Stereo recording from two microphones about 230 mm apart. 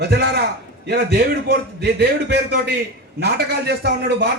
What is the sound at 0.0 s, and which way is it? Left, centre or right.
A man's voice, right.